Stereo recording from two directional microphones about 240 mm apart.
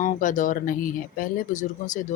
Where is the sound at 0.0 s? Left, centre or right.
Left.